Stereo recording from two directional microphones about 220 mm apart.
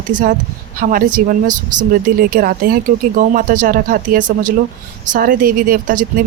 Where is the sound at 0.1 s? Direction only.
35° right (ahead or behind).